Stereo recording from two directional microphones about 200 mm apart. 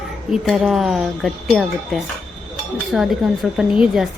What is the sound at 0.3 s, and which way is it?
A woman's voice, centre (ahead or behind).